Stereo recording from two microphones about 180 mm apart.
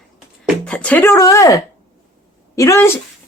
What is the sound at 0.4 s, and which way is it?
Speech, 5° left (ahead or behind).